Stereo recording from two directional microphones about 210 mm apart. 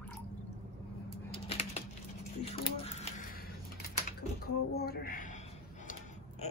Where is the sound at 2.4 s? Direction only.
30° left (ahead or behind).